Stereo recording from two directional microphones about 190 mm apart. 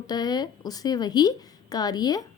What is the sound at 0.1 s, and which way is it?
A woman's voice, 20° left (ahead or behind).